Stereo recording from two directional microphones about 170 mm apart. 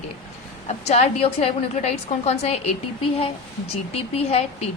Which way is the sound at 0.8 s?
40° left (ahead or behind).